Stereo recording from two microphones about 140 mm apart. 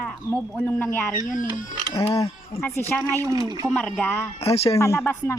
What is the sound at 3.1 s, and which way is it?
Speech, 25° right (ahead or behind).